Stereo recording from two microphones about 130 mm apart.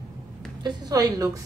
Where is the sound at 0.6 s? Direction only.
30° right (ahead or behind).